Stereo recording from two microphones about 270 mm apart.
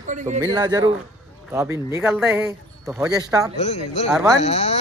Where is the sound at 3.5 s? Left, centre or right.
Left.